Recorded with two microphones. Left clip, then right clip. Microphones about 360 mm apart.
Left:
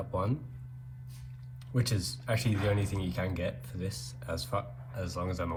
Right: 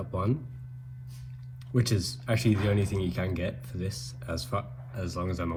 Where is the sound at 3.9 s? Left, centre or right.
Centre.